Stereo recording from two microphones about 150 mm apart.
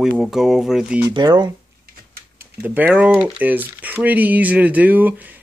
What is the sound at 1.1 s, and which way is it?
Speech, 30° right (ahead or behind).